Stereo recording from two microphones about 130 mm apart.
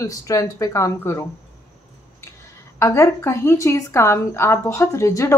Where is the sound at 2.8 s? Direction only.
20° left (ahead or behind).